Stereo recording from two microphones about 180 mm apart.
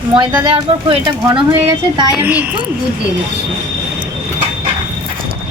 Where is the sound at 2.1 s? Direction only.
10° right (ahead or behind).